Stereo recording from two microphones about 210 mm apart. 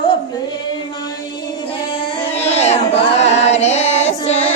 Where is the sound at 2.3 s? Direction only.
30° left (ahead or behind).